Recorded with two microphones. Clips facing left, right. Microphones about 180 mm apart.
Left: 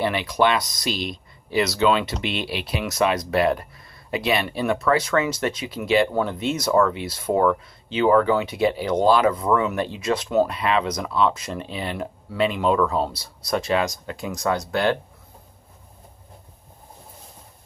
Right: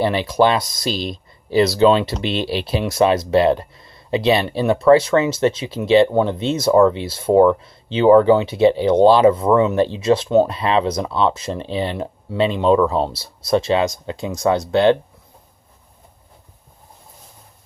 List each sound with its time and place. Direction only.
0.0 s speech: 30° right (ahead or behind)